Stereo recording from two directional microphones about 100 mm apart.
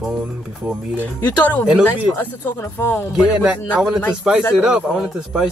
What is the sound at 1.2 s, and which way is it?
Speech, 15° left (ahead or behind).